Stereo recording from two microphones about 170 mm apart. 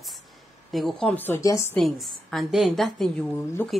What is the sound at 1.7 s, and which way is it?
A woman's voice, centre (ahead or behind).